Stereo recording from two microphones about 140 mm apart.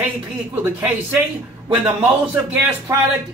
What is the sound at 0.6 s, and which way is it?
Speech, 15° right (ahead or behind).